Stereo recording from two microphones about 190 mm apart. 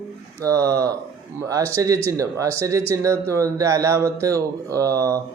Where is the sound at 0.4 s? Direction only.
20° right (ahead or behind).